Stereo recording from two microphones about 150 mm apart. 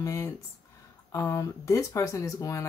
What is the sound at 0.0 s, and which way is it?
Speech, 20° left (ahead or behind).